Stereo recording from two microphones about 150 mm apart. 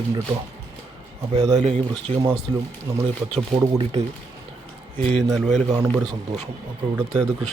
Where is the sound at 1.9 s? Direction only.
25° right (ahead or behind).